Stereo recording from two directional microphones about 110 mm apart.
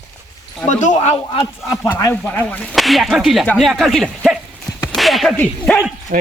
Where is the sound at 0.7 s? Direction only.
90° left.